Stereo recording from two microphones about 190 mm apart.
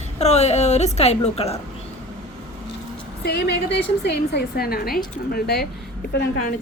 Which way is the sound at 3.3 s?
60° left (ahead or behind).